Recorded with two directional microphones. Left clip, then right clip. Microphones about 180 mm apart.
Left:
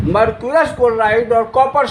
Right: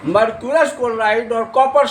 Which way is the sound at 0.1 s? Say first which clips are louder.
Left 1 dB; 45° left (ahead or behind).